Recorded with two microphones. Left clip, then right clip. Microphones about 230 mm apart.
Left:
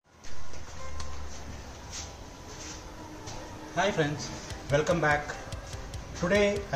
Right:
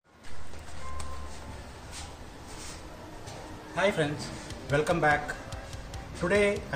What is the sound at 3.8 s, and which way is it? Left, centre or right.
A man's voice, centre.